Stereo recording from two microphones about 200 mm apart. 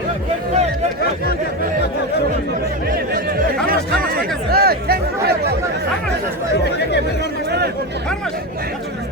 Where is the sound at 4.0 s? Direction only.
45° right (ahead or behind).